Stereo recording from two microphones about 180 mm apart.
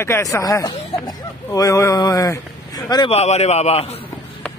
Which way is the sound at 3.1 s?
35° left (ahead or behind).